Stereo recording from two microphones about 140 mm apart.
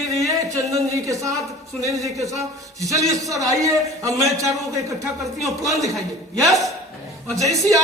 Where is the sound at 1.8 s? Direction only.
25° right (ahead or behind).